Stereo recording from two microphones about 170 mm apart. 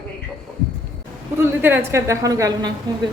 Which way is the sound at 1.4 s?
10° right (ahead or behind).